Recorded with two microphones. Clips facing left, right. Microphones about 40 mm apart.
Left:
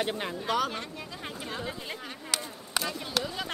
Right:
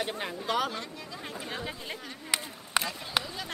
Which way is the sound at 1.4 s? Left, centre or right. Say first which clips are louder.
Left 1 dB; centre.